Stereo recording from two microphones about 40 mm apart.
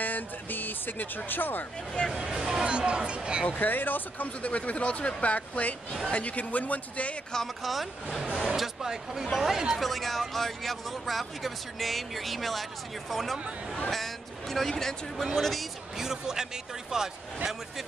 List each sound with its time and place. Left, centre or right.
0.0 s speech: left
2.1 s speech: centre
2.7 s speech: right
3.4 s speech: left
4.4 s speech: left
7.6 s speech: centre
9.8 s speech: centre
16.0 s speech: centre